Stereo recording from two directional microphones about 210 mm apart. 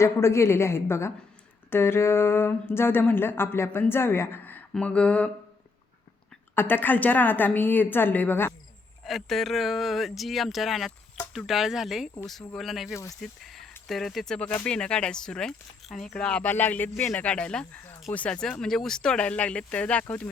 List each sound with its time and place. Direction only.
0.0 s speech: 15° left (ahead or behind)
6.6 s speech: 10° left (ahead or behind)